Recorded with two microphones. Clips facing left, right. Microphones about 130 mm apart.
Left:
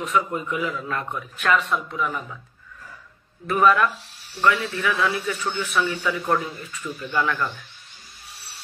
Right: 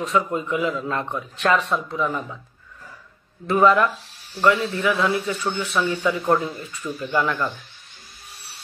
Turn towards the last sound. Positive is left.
turn(degrees=-25)  # may be behind; listen again after turning